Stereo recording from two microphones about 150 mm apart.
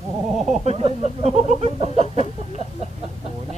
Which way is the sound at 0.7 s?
45° right (ahead or behind).